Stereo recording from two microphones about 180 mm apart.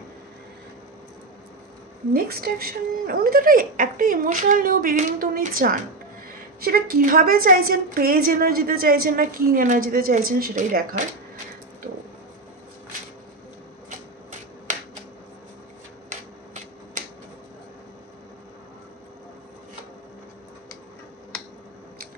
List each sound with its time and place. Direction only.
2.1 s a woman's voice: 60° right (ahead or behind)